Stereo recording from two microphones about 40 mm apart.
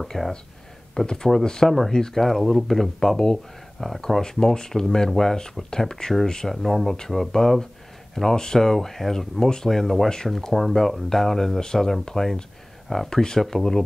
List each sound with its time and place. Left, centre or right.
0.0 s speech: centre
1.0 s speech: centre
6.5 s speech: centre
10.3 s speech: centre